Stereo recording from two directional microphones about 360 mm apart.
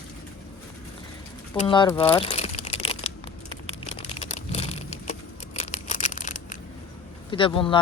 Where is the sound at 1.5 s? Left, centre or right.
Centre.